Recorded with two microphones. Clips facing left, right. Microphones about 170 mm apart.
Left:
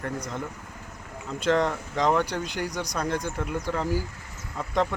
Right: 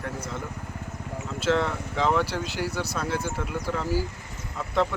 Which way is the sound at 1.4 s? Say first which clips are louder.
Left 1 dB; 5° right (ahead or behind).